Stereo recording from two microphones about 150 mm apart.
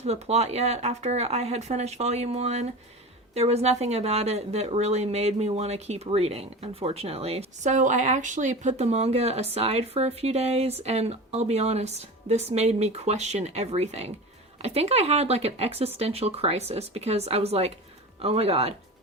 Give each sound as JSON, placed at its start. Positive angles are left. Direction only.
{"t": 0.0, "sound": "speech", "side_deg": -45}